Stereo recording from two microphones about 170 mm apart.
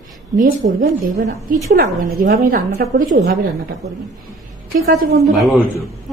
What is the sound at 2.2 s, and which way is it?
Speech, 60° right (ahead or behind).